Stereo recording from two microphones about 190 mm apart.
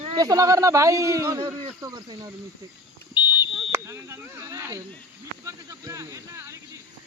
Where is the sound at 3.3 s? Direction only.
10° right (ahead or behind).